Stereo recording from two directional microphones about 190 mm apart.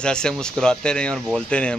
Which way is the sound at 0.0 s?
5° left (ahead or behind).